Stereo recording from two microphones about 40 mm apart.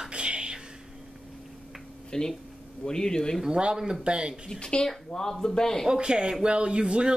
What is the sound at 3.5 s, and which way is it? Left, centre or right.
Speech, right.